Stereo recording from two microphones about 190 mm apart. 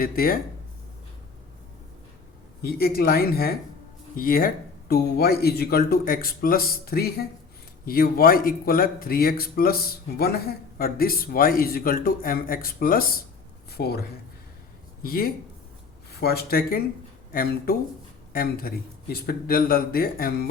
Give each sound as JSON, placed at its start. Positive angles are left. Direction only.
{"t": 0.0, "sound": "speech", "side_deg": 50}
{"t": 2.6, "sound": "speech", "side_deg": 55}
{"t": 15.0, "sound": "speech", "side_deg": 50}